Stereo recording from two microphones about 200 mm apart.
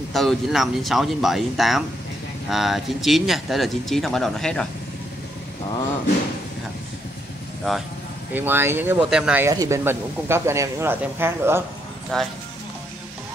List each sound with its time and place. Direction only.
0.1 s speech: centre (ahead or behind)
7.7 s speech: centre (ahead or behind)
9.5 s speech: 15° right (ahead or behind)
12.1 s speech: 5° left (ahead or behind)